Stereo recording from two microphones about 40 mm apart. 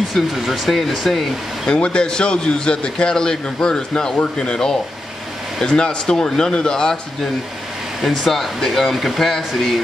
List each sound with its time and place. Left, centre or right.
0.1 s speech: centre
1.7 s a man's voice: left
8.2 s speech: centre